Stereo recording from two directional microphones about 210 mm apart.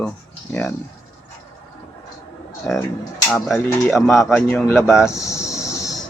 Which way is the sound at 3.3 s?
Centre (ahead or behind).